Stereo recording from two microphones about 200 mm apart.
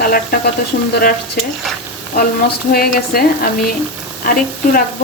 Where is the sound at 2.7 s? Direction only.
50° left (ahead or behind).